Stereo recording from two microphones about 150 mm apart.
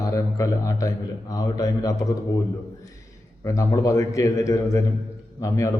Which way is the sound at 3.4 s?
20° left (ahead or behind).